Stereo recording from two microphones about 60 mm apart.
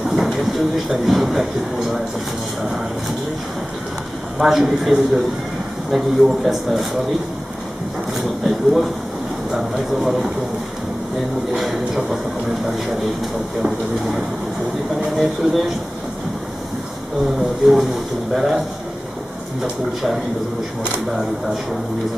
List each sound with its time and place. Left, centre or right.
0.0 s speech: centre
4.4 s a man's voice: centre
8.1 s a man's voice: centre
11.5 s a man's voice: centre
13.6 s a man's voice: centre
17.4 s a man's voice: centre
19.6 s a man's voice: centre